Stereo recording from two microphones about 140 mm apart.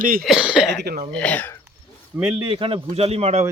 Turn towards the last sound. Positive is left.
turn(degrees=-50)  # may be behind; listen again after turning